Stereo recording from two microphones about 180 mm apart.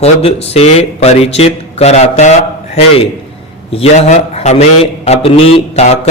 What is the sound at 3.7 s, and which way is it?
Speech, 35° left (ahead or behind).